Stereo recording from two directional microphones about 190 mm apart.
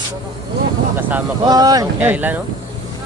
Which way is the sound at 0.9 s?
15° right (ahead or behind).